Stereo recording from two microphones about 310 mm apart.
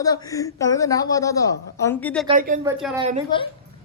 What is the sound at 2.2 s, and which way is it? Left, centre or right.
Speech, right.